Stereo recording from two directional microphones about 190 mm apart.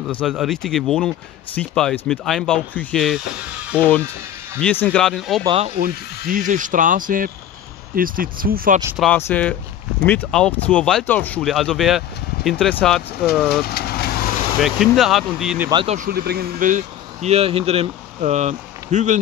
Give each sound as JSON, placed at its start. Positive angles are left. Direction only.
{"t": 0.1, "sound": "speech", "side_deg": 5}
{"t": 4.6, "sound": "speech", "side_deg": 10}
{"t": 5.4, "sound": "speech", "side_deg": -30}
{"t": 5.8, "sound": "speech", "side_deg": -50}
{"t": 8.9, "sound": "speech", "side_deg": 5}
{"t": 13.5, "sound": "speech", "side_deg": 55}
{"t": 14.6, "sound": "speech", "side_deg": 0}
{"t": 15.7, "sound": "speech", "side_deg": -30}
{"t": 16.0, "sound": "speech", "side_deg": -55}